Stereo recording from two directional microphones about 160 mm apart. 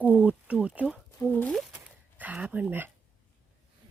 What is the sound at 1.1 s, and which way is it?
Speech, 10° left (ahead or behind).